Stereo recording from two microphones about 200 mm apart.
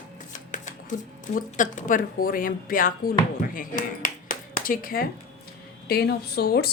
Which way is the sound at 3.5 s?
45° left (ahead or behind).